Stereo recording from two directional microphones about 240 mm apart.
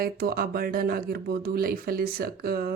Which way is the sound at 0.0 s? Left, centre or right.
Right.